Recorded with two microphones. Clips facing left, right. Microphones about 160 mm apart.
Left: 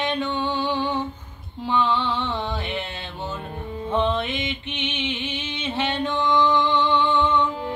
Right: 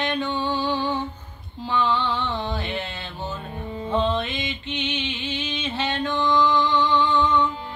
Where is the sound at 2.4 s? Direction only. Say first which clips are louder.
Even; 20° left (ahead or behind).